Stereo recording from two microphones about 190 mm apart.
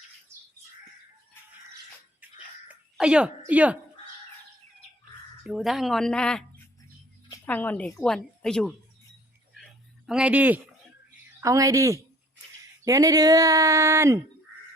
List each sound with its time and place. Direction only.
2.2 s music: 10° right (ahead or behind)
2.6 s speech: 5° right (ahead or behind)
5.4 s speech: centre (ahead or behind)
10.1 s speech: 5° right (ahead or behind)